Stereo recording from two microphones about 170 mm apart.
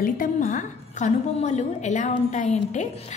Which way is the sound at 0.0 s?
55° left (ahead or behind).